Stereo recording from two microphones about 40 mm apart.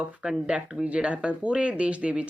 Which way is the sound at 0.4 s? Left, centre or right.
Right.